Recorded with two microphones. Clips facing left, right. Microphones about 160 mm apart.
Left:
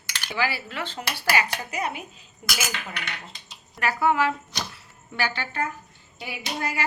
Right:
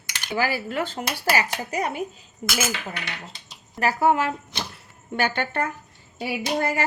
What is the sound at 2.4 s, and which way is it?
Cutlery, 25° right (ahead or behind).